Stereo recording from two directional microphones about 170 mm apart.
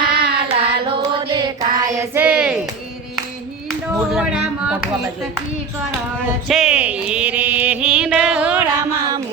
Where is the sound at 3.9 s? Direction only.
5° right (ahead or behind).